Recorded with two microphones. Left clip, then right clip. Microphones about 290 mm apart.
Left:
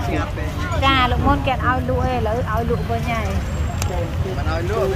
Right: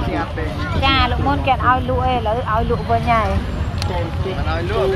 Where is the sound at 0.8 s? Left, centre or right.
Centre.